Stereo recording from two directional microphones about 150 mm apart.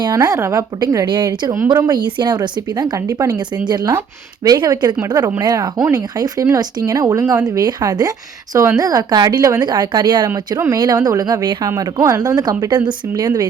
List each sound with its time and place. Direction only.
0.0 s speech: 25° right (ahead or behind)